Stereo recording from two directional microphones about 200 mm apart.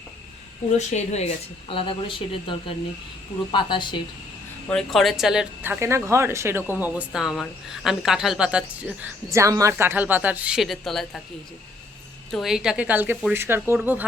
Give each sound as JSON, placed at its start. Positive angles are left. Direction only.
{"t": 0.8, "sound": "speech", "side_deg": 35}
{"t": 4.7, "sound": "speech", "side_deg": 0}
{"t": 12.3, "sound": "speech", "side_deg": 0}